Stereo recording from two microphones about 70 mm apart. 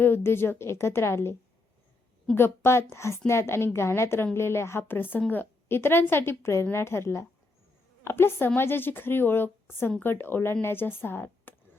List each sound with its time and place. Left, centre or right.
0.0 s a woman's voice: left